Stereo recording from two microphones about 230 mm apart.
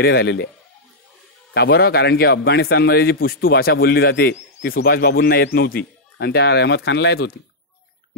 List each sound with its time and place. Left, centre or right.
0.0 s a man's voice: left
1.5 s a man's voice: left